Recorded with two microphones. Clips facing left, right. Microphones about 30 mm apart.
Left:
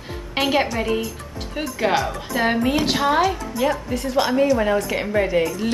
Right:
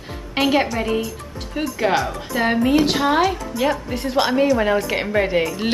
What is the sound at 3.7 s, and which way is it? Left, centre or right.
A woman's voice, right.